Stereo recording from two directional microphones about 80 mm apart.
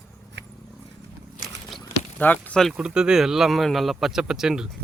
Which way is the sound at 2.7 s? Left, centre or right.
Centre.